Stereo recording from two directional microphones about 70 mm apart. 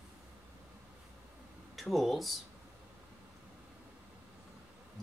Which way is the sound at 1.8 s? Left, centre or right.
Centre.